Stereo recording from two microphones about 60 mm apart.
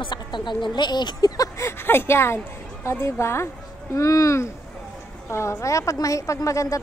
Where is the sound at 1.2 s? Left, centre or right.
Left.